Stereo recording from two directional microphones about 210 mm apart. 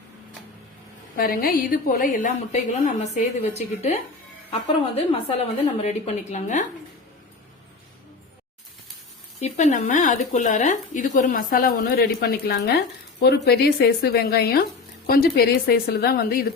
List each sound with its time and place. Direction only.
1.1 s a woman's voice: 45° left (ahead or behind)
4.6 s a woman's voice: 25° left (ahead or behind)
9.4 s speech: 35° left (ahead or behind)